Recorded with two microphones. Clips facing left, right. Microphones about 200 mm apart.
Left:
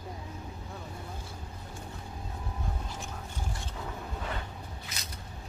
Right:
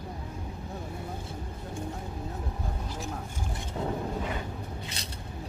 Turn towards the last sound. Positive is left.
turn(degrees=-30)  # may be behind; listen again after turning